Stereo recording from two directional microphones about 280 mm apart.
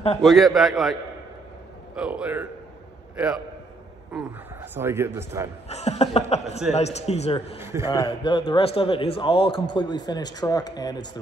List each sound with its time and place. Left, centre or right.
0.2 s a man's voice: centre
2.0 s a man's voice: centre
5.7 s a man's voice: left
7.5 s a man's voice: centre
8.2 s a man's voice: centre